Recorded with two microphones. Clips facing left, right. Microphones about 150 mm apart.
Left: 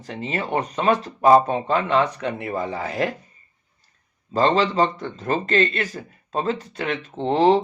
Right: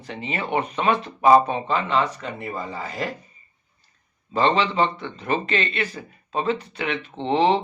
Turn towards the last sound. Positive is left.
turn(degrees=40)  # may be behind; listen again after turning